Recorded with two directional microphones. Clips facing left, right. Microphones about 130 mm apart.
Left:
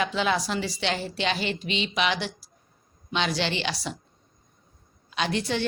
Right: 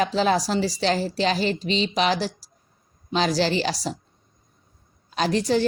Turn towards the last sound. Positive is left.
turn(degrees=-40)  # may be behind; listen again after turning